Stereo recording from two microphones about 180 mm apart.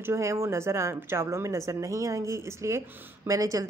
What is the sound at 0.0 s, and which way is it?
A woman's voice, 15° right (ahead or behind).